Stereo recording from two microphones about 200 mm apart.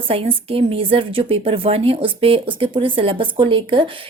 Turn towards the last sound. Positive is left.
turn(degrees=-25)  # may be behind; listen again after turning